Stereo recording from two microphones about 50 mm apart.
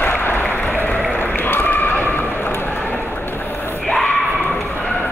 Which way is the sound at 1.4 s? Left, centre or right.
Left.